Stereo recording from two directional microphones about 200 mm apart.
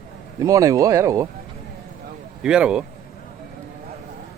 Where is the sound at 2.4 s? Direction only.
5° right (ahead or behind).